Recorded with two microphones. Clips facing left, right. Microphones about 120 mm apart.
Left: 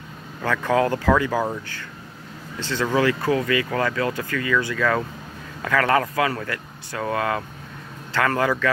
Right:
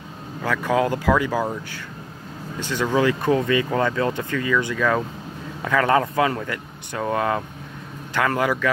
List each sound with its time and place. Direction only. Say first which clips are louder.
0.4 s speech: even; 10° right (ahead or behind)
2.6 s speech: right 1 dB; 15° right (ahead or behind)